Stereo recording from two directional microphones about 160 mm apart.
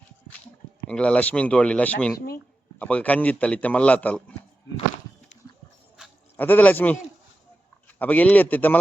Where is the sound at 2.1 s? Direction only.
70° left (ahead or behind).